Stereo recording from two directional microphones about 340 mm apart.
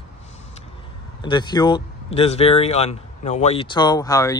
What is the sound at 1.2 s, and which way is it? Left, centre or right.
Speech, centre.